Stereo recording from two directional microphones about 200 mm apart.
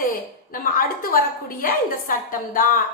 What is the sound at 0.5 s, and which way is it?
A woman's voice, 45° left (ahead or behind).